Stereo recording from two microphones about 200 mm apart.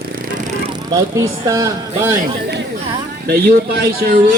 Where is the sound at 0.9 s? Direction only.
15° right (ahead or behind).